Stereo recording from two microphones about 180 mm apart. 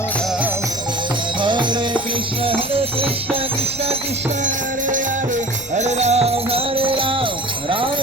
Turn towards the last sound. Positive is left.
turn(degrees=-30)  # may be behind; listen again after turning